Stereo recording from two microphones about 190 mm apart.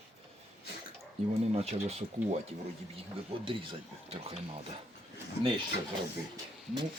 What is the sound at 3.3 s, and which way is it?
Speech, 30° right (ahead or behind).